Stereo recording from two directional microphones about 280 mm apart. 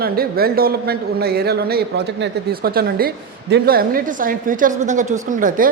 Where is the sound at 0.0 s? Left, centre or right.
Right.